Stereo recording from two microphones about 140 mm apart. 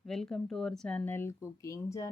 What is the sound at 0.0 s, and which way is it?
Speech, 5° left (ahead or behind).